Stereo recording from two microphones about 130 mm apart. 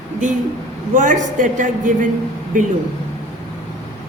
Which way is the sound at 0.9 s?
80° right.